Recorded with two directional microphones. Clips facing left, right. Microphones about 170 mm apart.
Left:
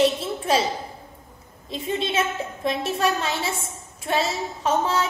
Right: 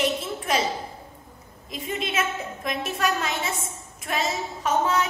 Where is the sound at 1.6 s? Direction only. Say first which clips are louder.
Left 4 dB; 30° left (ahead or behind).